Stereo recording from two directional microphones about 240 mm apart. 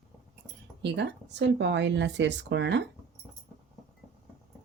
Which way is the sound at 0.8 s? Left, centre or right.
Right.